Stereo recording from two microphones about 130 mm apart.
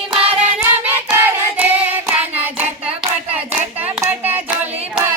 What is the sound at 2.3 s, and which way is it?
Hands, 10° right (ahead or behind).